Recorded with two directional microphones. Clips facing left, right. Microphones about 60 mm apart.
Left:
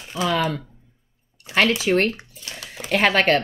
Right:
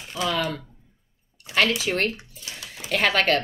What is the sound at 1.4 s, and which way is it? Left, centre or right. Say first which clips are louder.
Speech: left 3 dB; left.